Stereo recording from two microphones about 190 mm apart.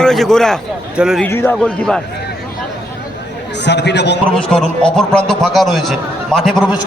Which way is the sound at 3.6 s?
65° left (ahead or behind).